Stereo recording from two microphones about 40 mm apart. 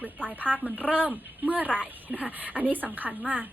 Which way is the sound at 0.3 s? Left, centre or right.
Right.